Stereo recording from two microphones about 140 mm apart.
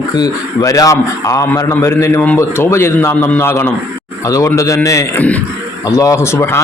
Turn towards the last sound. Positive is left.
turn(degrees=20)  # may be behind; listen again after turning